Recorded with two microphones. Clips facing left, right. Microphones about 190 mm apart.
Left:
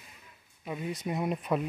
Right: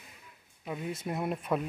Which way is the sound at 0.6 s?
Centre (ahead or behind).